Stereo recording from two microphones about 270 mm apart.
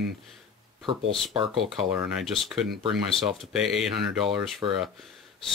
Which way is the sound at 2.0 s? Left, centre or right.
Centre.